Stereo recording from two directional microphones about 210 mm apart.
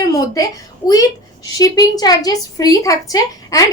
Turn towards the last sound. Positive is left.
turn(degrees=15)  # may be behind; listen again after turning